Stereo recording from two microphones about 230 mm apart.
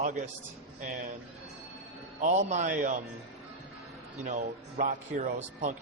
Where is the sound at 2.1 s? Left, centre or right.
Right.